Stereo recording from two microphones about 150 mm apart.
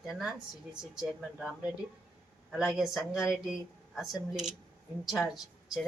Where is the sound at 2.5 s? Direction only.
Centre (ahead or behind).